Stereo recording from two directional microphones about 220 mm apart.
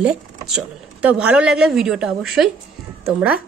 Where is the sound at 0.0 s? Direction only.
5° right (ahead or behind).